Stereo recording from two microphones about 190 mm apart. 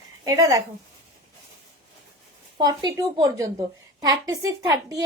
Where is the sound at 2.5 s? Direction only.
20° right (ahead or behind).